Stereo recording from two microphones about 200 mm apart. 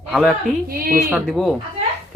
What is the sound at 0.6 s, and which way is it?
Speech, 45° right (ahead or behind).